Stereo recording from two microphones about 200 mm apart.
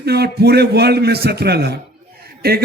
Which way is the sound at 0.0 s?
55° right (ahead or behind).